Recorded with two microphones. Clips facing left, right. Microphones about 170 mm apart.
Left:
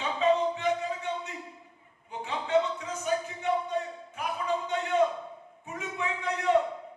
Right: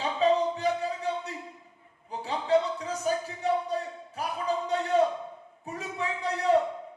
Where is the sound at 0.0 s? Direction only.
35° right (ahead or behind).